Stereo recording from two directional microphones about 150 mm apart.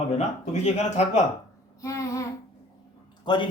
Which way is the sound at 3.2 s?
30° left (ahead or behind).